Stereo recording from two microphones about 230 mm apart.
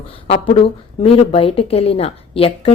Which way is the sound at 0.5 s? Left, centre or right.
Left.